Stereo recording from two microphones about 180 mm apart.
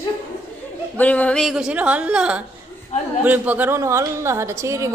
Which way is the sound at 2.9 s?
40° left (ahead or behind).